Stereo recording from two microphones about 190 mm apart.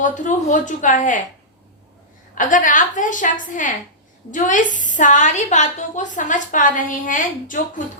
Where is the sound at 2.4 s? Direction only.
45° left (ahead or behind).